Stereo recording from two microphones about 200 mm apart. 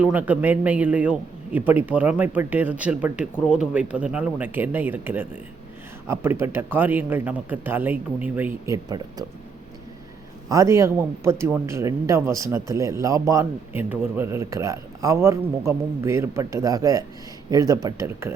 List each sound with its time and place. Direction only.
0.0 s speech: 10° right (ahead or behind)
10.5 s speech: 15° right (ahead or behind)